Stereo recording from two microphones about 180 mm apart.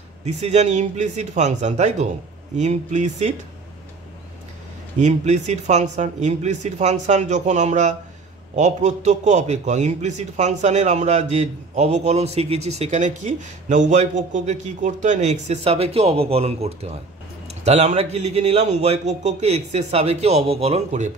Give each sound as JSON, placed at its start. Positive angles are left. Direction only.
{"t": 0.2, "sound": "a man's voice", "side_deg": -40}
{"t": 4.9, "sound": "a man's voice", "side_deg": -40}